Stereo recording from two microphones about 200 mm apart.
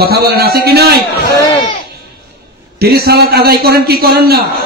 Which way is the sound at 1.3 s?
20° left (ahead or behind).